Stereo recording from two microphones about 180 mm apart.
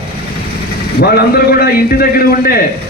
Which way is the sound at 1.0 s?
60° left (ahead or behind).